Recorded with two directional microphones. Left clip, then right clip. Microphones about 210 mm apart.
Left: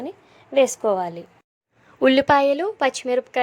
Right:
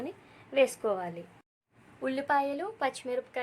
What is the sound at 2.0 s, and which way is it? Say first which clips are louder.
Speech: left 13 dB; 40° left (ahead or behind).